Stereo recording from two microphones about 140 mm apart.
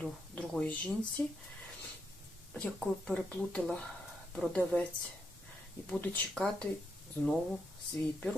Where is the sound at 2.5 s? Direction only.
5° left (ahead or behind).